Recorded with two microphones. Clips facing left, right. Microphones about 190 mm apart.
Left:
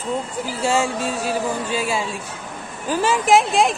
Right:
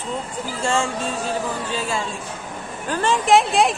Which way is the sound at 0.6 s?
5° left (ahead or behind).